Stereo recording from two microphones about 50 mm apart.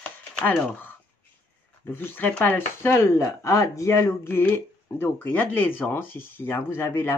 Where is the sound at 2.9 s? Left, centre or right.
Left.